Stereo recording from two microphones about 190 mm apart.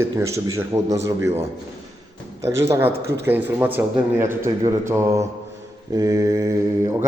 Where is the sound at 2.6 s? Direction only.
10° right (ahead or behind).